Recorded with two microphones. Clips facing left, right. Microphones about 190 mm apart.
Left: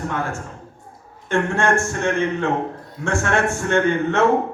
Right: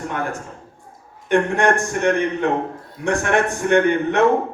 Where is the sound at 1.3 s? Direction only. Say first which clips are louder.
Right 2 dB; 15° right (ahead or behind).